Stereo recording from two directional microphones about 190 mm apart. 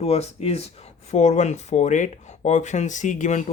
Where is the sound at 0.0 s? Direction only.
35° left (ahead or behind).